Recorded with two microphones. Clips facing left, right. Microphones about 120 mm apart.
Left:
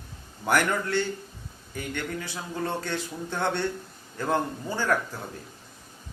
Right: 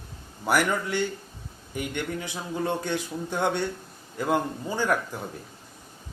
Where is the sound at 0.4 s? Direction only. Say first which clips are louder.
Even; 5° right (ahead or behind).